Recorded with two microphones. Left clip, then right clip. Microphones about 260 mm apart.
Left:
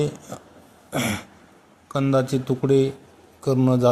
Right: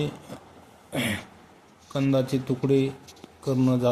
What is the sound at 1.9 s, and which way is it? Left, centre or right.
A man's voice, centre.